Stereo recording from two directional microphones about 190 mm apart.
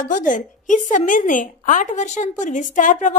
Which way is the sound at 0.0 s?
45° left (ahead or behind).